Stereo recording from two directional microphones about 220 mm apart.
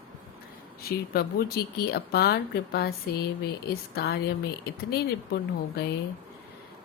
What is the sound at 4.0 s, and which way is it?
Speech, 45° left (ahead or behind).